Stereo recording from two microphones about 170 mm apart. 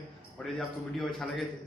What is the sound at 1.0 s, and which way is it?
Speech, centre (ahead or behind).